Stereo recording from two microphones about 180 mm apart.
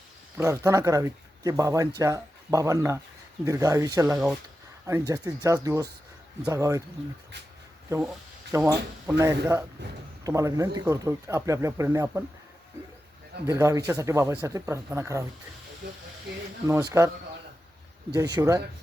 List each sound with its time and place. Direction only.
0.3 s speech: 15° right (ahead or behind)
8.5 s speech: 15° right (ahead or behind)
13.5 s speech: 15° right (ahead or behind)
15.8 s speech: 65° right (ahead or behind)
16.6 s speech: 15° right (ahead or behind)
18.1 s speech: 20° right (ahead or behind)